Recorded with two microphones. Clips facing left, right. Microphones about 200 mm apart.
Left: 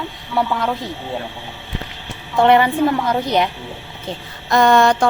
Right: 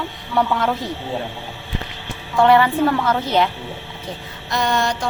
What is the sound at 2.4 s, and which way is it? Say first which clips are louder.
A woman's voice: left 1 dB; 20° left (ahead or behind).